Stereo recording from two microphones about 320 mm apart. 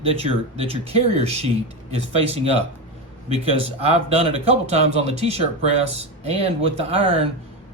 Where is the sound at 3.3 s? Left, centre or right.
Centre.